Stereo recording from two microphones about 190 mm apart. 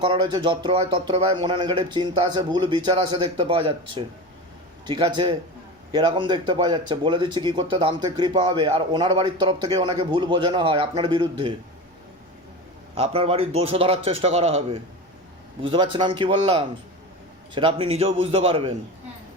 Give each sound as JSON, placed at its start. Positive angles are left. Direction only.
{"t": 0.0, "sound": "speech", "side_deg": -25}
{"t": 13.0, "sound": "a man's voice", "side_deg": -30}